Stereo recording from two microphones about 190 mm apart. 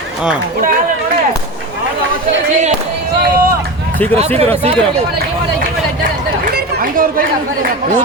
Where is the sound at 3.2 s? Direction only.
50° right (ahead or behind).